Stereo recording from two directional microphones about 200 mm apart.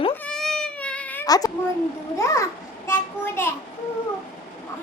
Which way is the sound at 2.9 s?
10° left (ahead or behind).